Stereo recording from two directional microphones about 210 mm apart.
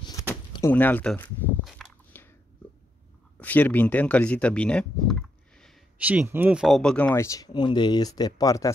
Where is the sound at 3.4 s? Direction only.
10° left (ahead or behind).